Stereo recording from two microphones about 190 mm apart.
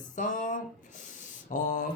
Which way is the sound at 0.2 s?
40° left (ahead or behind).